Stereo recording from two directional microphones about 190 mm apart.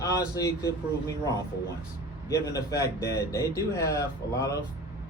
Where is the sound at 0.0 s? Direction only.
15° left (ahead or behind).